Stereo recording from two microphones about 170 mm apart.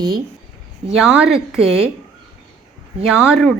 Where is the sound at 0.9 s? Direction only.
Centre (ahead or behind).